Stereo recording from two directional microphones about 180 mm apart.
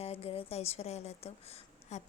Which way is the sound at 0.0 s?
35° left (ahead or behind).